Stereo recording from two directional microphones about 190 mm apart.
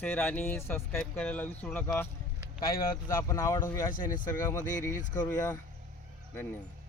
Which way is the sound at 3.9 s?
45° left (ahead or behind).